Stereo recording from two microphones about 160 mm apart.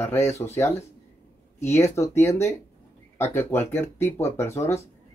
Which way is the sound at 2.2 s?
15° left (ahead or behind).